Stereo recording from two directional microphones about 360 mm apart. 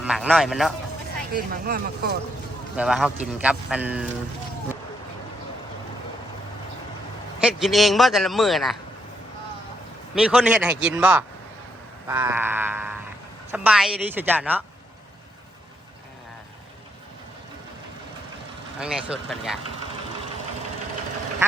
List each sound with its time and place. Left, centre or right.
0.0 s a man's voice: centre
1.3 s speech: right
2.7 s a man's voice: centre
7.4 s a man's voice: centre
10.2 s a man's voice: centre
18.8 s a man's voice: centre